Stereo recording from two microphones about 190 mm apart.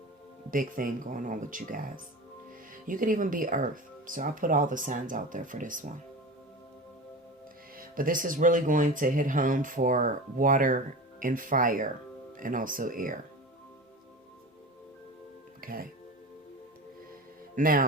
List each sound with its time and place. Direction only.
0.5 s speech: 45° right (ahead or behind)
2.8 s speech: 45° right (ahead or behind)
7.8 s speech: 45° right (ahead or behind)
15.6 s speech: 50° right (ahead or behind)
17.5 s speech: 50° right (ahead or behind)